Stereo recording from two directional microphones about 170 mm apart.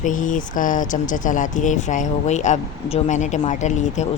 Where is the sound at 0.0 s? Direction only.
50° left (ahead or behind).